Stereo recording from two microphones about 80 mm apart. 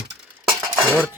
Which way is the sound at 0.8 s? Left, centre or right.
Right.